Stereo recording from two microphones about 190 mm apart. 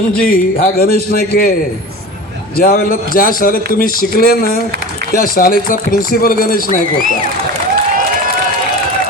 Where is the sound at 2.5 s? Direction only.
50° left (ahead or behind).